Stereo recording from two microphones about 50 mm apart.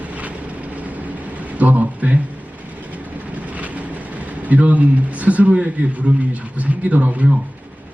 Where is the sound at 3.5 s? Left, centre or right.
Right.